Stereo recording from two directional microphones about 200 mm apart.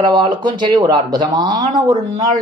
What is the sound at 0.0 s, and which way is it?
Speech, 20° right (ahead or behind).